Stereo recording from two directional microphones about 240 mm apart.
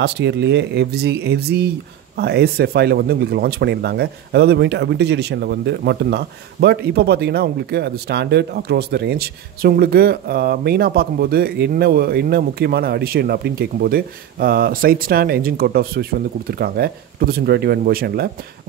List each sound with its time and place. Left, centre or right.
0.0 s speech: right